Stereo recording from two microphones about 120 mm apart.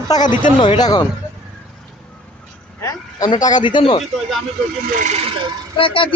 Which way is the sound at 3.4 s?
35° left (ahead or behind).